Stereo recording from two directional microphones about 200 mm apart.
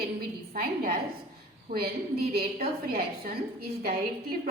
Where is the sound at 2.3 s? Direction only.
50° right (ahead or behind).